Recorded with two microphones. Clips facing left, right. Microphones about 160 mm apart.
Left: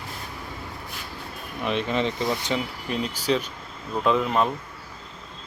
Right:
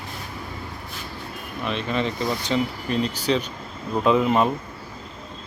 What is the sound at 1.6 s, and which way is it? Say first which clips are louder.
Speech: left 1 dB; 20° left (ahead or behind).